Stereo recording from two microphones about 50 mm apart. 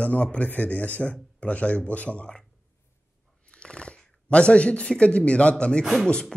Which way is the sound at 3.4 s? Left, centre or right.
Centre.